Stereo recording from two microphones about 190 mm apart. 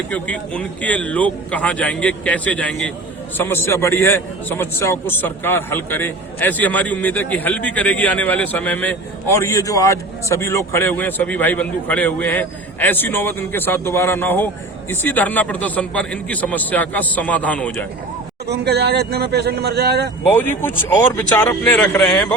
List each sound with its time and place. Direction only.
0.1 s a man's voice: 5° left (ahead or behind)
18.4 s speech: 60° right (ahead or behind)
20.2 s a man's voice: 10° left (ahead or behind)